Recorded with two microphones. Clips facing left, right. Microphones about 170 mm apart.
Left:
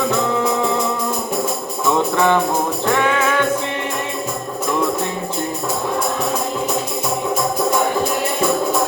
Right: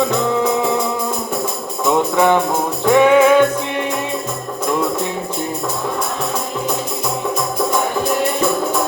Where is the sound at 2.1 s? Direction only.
15° right (ahead or behind).